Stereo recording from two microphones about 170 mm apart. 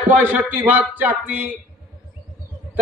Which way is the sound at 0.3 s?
10° right (ahead or behind).